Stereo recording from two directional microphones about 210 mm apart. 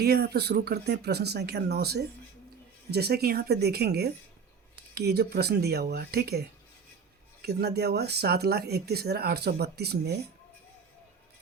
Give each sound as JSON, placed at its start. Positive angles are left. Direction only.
{"t": 0.0, "sound": "speech", "side_deg": -50}
{"t": 7.4, "sound": "speech", "side_deg": -50}